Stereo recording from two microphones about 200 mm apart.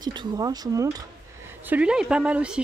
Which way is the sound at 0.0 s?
20° right (ahead or behind).